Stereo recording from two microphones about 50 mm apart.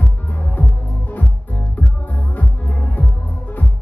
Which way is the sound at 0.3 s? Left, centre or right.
Left.